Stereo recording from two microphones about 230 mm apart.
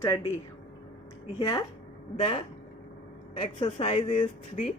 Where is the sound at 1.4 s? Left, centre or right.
Centre.